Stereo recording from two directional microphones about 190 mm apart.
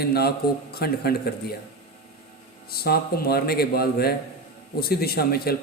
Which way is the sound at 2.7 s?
55° left (ahead or behind).